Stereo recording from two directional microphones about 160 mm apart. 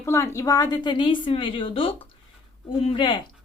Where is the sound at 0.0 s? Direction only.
15° left (ahead or behind).